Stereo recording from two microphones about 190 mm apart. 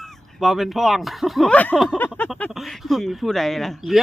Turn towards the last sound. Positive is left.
turn(degrees=0)  # may be behind; listen again after turning